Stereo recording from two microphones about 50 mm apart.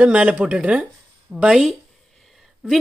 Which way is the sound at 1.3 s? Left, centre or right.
Centre.